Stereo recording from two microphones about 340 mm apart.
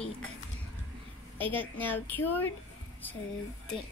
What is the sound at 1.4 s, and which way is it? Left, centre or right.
A woman's voice, centre.